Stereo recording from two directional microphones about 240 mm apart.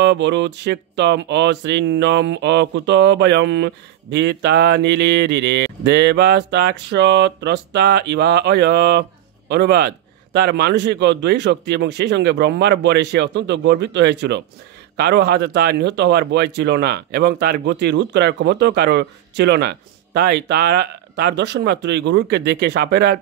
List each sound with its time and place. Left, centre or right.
0.0 s speech: right